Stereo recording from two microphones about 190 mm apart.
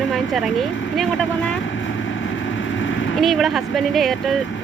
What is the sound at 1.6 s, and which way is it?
Vehicle, 90° left.